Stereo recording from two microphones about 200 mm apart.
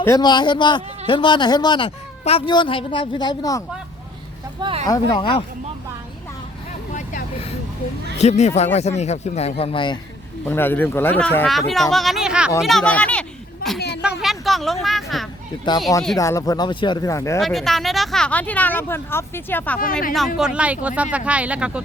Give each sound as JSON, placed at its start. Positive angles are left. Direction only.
{"t": 0.0, "sound": "a man's voice", "side_deg": 20}
{"t": 4.6, "sound": "speech", "side_deg": -30}
{"t": 4.9, "sound": "a man's voice", "side_deg": 25}
{"t": 6.9, "sound": "vehicle", "side_deg": 40}
{"t": 8.2, "sound": "speech", "side_deg": 35}
{"t": 10.5, "sound": "speech", "side_deg": 10}
{"t": 13.7, "sound": "a sound", "side_deg": 55}
{"t": 14.0, "sound": "a woman's voice", "side_deg": -5}
{"t": 16.1, "sound": "speech", "side_deg": 15}
{"t": 17.4, "sound": "speech", "side_deg": 0}